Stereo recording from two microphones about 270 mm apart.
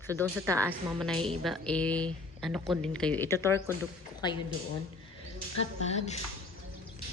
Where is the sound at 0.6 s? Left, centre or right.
Centre.